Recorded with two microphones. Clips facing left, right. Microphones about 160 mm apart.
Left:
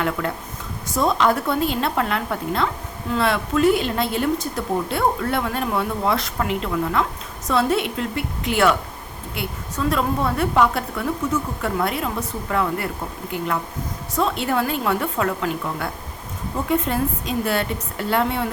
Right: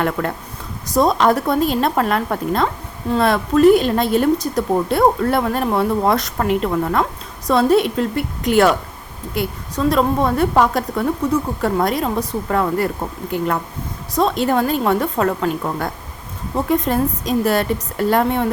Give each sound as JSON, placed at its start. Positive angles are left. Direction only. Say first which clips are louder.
{"t": 0.2, "sound": "speech", "louder": "right 3 dB", "side_deg": -45}
{"t": 14.2, "sound": "speech", "louder": "right 5 dB", "side_deg": -35}